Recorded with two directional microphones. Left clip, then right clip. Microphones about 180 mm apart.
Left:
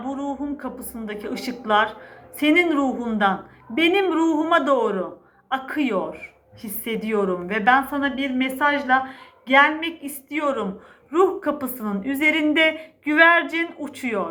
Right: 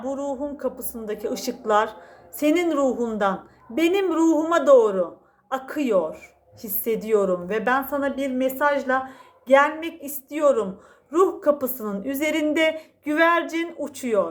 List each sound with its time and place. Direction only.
0.2 s a woman's voice: 45° right (ahead or behind)